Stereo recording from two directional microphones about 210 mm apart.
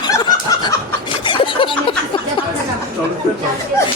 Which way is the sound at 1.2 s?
25° left (ahead or behind).